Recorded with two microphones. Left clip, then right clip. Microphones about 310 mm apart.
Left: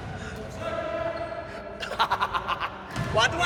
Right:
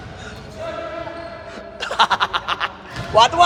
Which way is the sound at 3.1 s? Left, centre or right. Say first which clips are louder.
Right 11 dB; centre.